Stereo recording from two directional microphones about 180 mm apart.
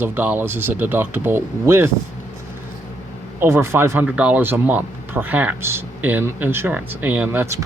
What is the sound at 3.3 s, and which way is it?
Speech, 15° right (ahead or behind).